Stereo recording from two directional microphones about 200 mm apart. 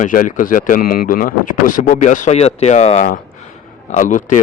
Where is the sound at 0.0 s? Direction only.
40° left (ahead or behind).